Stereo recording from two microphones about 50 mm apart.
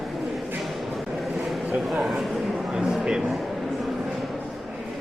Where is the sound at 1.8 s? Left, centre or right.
Centre.